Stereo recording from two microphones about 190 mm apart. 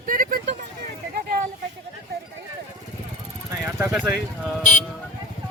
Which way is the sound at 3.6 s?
10° right (ahead or behind).